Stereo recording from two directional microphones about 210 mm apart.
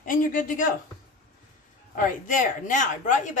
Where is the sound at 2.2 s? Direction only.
40° left (ahead or behind).